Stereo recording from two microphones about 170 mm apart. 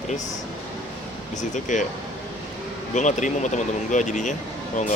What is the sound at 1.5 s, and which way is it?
Speech, 45° left (ahead or behind).